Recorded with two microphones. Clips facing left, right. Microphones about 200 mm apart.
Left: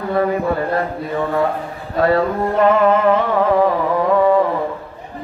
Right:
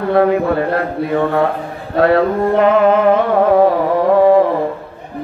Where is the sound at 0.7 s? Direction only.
65° right (ahead or behind).